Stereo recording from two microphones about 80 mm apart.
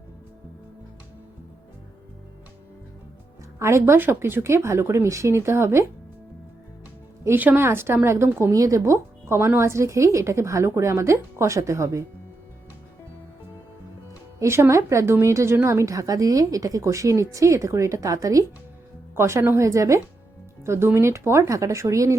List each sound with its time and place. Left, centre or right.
3.6 s a woman's voice: right
7.3 s a woman's voice: right
8.5 s a woman's voice: right
14.3 s a woman's voice: right
19.1 s a woman's voice: right